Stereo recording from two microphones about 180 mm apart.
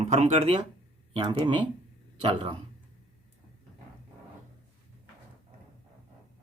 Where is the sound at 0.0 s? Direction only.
40° right (ahead or behind).